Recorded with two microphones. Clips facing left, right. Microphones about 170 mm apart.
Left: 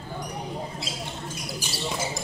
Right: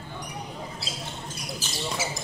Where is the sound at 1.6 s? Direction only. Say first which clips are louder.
Left 2 dB; 15° left (ahead or behind).